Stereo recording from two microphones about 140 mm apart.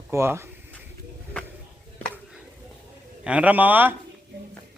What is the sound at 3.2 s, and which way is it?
Speech, 10° right (ahead or behind).